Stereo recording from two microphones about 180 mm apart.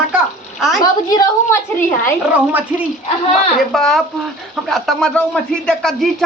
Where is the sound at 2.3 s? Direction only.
10° right (ahead or behind).